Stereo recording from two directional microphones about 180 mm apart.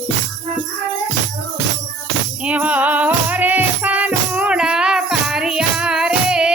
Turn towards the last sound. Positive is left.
turn(degrees=-5)  # may be behind; listen again after turning